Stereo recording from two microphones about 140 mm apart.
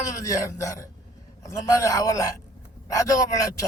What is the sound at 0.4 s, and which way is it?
Speech, 25° left (ahead or behind).